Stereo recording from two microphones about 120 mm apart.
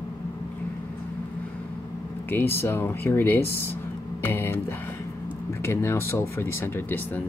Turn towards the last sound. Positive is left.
turn(degrees=15)  # may be behind; listen again after turning